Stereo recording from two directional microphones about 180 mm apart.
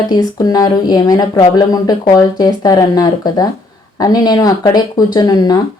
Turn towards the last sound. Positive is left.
turn(degrees=20)  # may be behind; listen again after turning